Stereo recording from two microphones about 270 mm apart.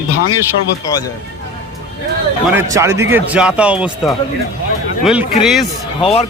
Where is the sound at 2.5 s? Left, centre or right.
Centre.